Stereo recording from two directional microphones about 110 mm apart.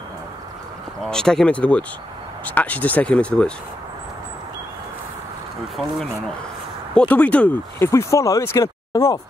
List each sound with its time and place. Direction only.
1.0 s speech: 5° left (ahead or behind)
6.9 s speech: 10° left (ahead or behind)
7.9 s speech: 30° left (ahead or behind)